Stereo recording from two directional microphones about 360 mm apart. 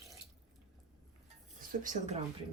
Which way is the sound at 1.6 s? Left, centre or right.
Right.